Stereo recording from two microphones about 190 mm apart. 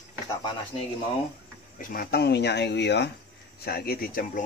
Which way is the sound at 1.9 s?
55° left (ahead or behind).